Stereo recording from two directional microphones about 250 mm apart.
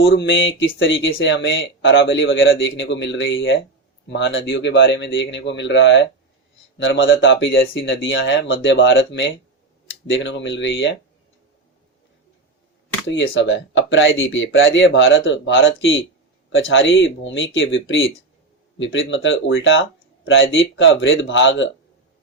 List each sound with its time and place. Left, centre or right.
0.0 s speech: left
13.1 s speech: left